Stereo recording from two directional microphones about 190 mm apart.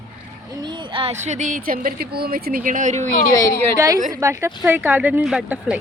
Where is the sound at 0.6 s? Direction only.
25° right (ahead or behind).